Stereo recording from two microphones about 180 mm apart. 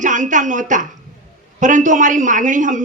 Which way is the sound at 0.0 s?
45° right (ahead or behind).